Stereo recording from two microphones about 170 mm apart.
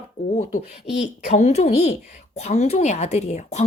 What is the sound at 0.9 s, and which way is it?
A woman's voice, 45° left (ahead or behind).